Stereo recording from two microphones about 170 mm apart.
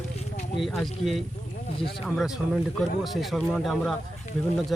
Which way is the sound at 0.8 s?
Centre (ahead or behind).